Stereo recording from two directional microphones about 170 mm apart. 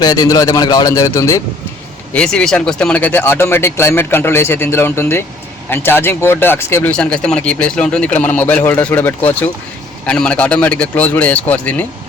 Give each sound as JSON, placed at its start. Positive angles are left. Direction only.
{"t": 0.0, "sound": "a man's voice", "side_deg": 20}
{"t": 2.1, "sound": "speech", "side_deg": 5}